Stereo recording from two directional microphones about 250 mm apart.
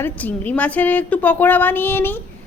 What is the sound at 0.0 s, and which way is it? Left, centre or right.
A woman's voice, centre.